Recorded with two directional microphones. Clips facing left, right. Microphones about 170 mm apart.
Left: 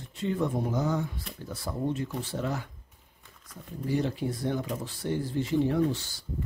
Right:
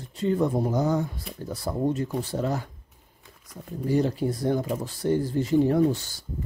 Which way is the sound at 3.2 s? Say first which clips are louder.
Right 4 dB; 10° right (ahead or behind).